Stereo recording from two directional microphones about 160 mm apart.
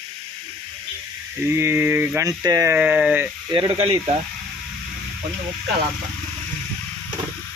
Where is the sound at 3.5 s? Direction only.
35° right (ahead or behind).